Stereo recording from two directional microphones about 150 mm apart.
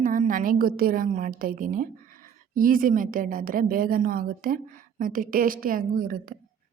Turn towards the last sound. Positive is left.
turn(degrees=-70)  # may be behind; listen again after turning